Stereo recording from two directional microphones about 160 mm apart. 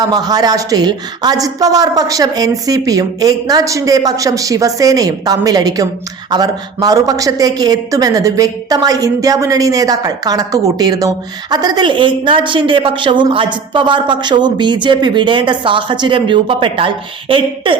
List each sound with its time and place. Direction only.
0.0 s a woman's voice: 25° right (ahead or behind)